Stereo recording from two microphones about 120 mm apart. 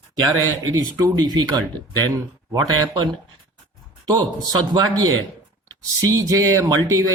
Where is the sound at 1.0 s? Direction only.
35° right (ahead or behind).